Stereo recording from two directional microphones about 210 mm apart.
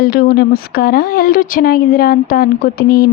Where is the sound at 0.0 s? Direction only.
45° left (ahead or behind).